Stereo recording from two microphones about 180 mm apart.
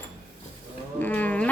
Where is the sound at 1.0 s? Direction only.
10° left (ahead or behind).